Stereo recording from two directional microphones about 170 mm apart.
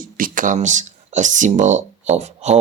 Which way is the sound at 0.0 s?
50° right (ahead or behind).